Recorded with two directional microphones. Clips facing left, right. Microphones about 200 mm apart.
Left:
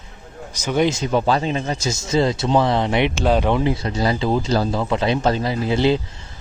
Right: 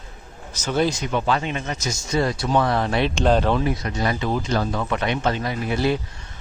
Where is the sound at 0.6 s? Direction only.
15° left (ahead or behind).